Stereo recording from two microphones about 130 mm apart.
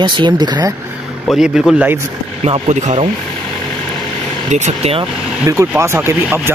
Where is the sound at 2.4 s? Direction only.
60° right (ahead or behind).